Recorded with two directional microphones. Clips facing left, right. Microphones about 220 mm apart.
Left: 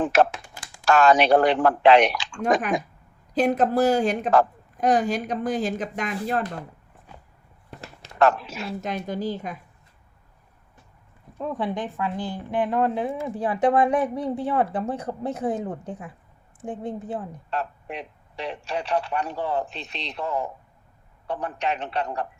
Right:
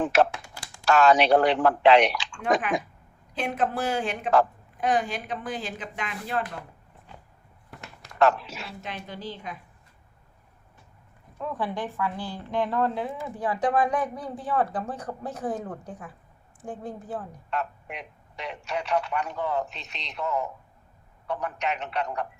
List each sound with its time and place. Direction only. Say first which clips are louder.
0.0 s a woman's voice: left 2 dB; 50° left (ahead or behind)
8.2 s speech: left 2 dB; 50° left (ahead or behind)
11.3 s a woman's voice: left 3 dB; 20° left (ahead or behind)